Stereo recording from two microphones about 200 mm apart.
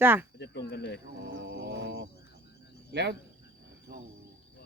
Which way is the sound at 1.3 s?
65° right (ahead or behind).